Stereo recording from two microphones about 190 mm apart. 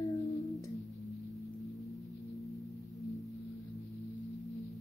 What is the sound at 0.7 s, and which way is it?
Singing bowl, centre (ahead or behind).